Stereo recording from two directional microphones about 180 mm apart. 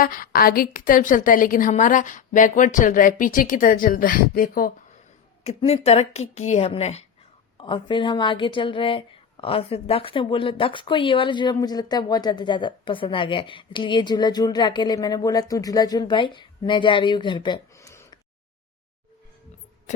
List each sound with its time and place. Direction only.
0.0 s a woman's voice: 50° left (ahead or behind)
5.4 s a woman's voice: 35° left (ahead or behind); by 18.2 s 15° left (ahead or behind)